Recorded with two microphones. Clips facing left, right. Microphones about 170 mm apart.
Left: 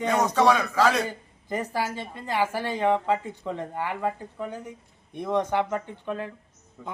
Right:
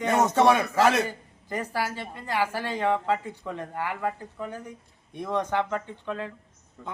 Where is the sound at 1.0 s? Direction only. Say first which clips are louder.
Left 2 dB; 15° left (ahead or behind).